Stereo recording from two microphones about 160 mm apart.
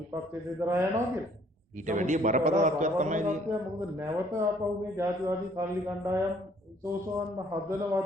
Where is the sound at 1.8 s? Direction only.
50° right (ahead or behind).